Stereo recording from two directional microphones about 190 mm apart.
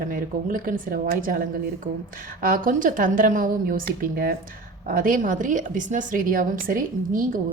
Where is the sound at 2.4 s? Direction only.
45° right (ahead or behind).